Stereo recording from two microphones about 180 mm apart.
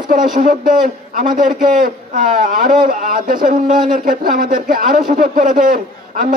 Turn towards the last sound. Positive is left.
turn(degrees=-50)  # may be behind; listen again after turning